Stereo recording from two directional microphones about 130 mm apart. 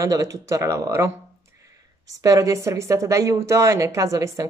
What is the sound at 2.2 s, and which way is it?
A woman's voice, 25° right (ahead or behind).